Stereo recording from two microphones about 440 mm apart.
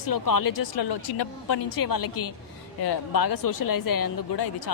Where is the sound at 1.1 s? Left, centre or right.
Left.